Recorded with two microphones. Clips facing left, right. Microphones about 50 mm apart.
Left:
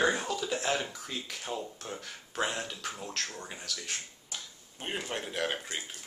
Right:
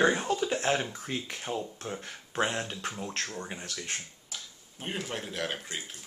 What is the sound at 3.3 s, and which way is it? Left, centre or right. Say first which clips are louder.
Speech: right 4 dB; centre.